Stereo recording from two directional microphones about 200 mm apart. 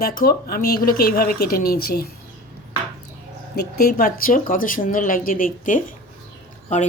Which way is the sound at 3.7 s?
45° left (ahead or behind).